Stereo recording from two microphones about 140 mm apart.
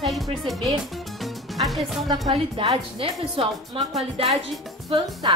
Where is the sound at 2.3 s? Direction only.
40° right (ahead or behind).